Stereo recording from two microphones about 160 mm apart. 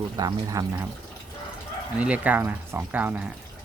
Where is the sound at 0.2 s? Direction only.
20° right (ahead or behind).